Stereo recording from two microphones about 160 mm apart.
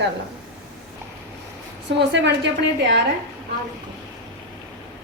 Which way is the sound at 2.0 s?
90° right.